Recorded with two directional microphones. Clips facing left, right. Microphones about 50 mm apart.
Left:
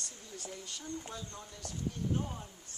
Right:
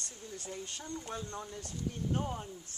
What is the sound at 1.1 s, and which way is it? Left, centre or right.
Speech, right.